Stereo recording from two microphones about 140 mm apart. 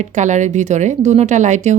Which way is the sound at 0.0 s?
60° right (ahead or behind).